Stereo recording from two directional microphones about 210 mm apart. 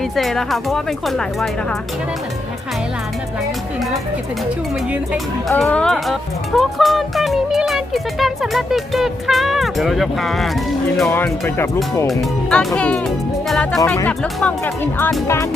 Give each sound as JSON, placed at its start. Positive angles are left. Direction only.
{"t": 0.2, "sound": "speech", "side_deg": 0}
{"t": 5.1, "sound": "speech", "side_deg": 0}